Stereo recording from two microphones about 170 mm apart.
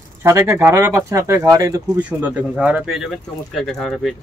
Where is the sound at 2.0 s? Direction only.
10° right (ahead or behind).